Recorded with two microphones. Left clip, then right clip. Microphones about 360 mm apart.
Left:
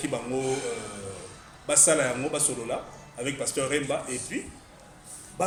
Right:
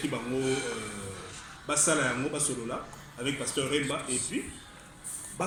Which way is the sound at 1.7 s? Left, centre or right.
Left.